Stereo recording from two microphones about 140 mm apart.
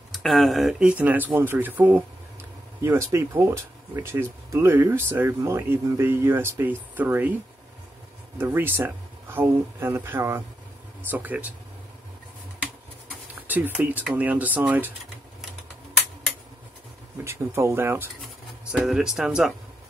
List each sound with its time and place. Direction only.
0.1 s speech: centre (ahead or behind)
8.4 s speech: 15° right (ahead or behind)
13.5 s speech: 15° right (ahead or behind)
17.2 s speech: 20° right (ahead or behind)
18.7 s speech: 5° right (ahead or behind)